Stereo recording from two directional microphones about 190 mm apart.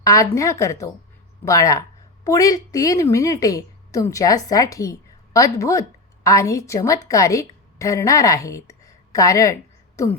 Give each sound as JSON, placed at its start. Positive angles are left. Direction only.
{"t": 0.0, "sound": "a woman's voice", "side_deg": 15}